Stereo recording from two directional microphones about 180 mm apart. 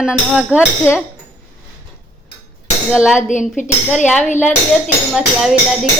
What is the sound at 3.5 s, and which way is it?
Speech, 45° left (ahead or behind).